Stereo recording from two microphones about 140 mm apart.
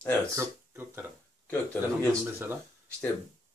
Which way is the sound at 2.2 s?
15° right (ahead or behind).